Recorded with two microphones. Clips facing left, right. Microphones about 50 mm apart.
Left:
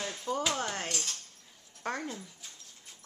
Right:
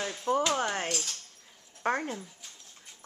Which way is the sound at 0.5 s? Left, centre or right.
Centre.